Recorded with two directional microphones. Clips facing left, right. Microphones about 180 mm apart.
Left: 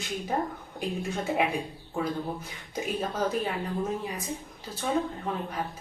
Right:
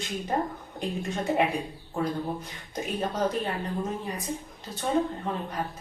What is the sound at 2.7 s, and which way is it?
Speech, 5° left (ahead or behind).